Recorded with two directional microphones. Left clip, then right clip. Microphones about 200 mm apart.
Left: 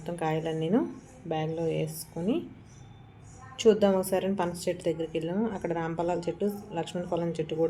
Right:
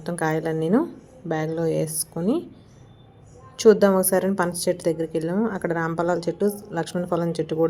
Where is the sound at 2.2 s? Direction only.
30° right (ahead or behind).